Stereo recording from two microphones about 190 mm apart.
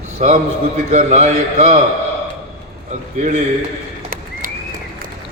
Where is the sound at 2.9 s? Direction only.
35° right (ahead or behind).